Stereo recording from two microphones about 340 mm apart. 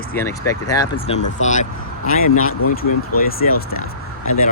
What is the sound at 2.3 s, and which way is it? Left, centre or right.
Speech, left.